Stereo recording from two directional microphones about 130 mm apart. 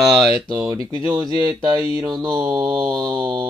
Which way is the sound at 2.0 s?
30° right (ahead or behind).